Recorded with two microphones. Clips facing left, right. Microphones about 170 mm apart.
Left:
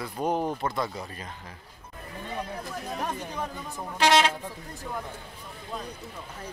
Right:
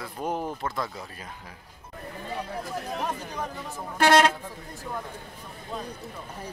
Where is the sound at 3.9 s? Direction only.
50° right (ahead or behind).